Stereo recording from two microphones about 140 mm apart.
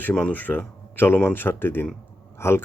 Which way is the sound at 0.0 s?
10° left (ahead or behind).